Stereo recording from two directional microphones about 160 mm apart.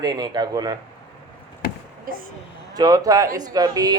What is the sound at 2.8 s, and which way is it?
A man's voice, 25° right (ahead or behind).